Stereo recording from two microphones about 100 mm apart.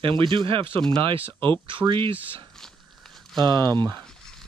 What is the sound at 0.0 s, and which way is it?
Speech, 55° right (ahead or behind).